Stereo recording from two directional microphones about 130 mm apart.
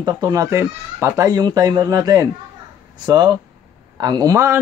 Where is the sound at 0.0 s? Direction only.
30° right (ahead or behind).